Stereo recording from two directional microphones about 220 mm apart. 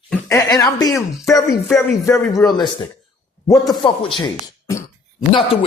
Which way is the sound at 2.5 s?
20° left (ahead or behind).